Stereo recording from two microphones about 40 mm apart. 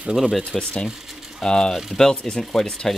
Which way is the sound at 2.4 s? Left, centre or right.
Centre.